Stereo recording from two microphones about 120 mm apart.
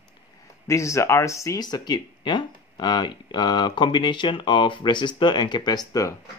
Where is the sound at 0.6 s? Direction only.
25° left (ahead or behind).